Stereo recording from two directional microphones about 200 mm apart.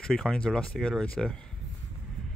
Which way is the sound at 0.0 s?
5° left (ahead or behind).